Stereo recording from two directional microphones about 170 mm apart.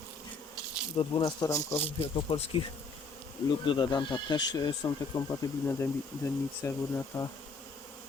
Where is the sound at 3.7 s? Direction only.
25° left (ahead or behind).